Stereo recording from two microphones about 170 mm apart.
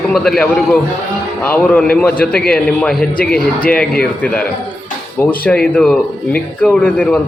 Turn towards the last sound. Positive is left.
turn(degrees=10)  # may be behind; listen again after turning